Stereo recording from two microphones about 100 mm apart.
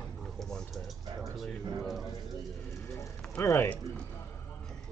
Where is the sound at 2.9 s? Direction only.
30° left (ahead or behind).